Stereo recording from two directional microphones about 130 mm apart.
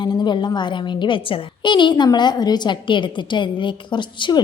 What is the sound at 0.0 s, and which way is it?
A woman's voice, 35° left (ahead or behind).